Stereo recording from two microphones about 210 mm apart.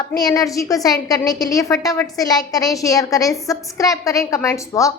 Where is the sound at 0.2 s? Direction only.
15° left (ahead or behind).